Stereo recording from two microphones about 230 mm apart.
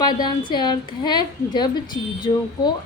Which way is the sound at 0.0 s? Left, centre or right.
Centre.